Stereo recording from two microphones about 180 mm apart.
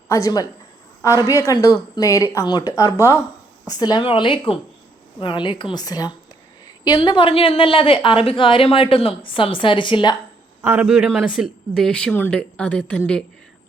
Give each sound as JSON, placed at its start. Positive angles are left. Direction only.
{"t": 0.1, "sound": "a woman's voice", "side_deg": 20}
{"t": 10.6, "sound": "a man's voice", "side_deg": -10}